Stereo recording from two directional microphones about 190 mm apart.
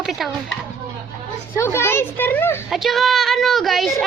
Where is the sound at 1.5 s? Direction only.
15° left (ahead or behind).